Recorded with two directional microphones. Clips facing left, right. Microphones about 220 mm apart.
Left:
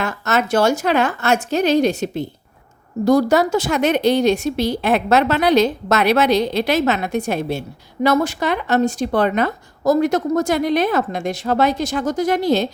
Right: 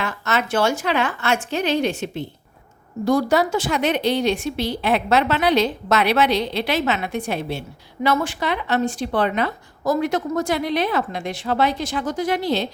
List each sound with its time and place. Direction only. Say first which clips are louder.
0.0 s a woman's voice: left 4 dB; 45° left (ahead or behind)